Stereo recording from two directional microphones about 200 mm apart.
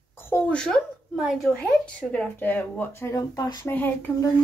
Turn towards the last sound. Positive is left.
turn(degrees=15)  # may be behind; listen again after turning